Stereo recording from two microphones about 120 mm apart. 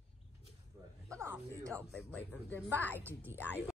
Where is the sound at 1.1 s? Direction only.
25° right (ahead or behind).